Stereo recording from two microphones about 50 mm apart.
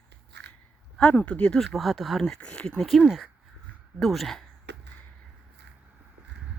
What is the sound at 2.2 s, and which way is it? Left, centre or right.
Speech, centre.